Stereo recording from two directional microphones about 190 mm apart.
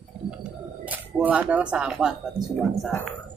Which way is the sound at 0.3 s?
5° right (ahead or behind).